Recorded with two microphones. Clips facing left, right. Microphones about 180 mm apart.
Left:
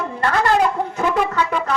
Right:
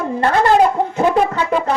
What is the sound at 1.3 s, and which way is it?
Speech, 30° right (ahead or behind).